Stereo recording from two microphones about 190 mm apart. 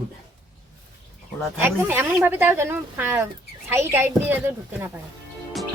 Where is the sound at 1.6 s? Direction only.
10° right (ahead or behind).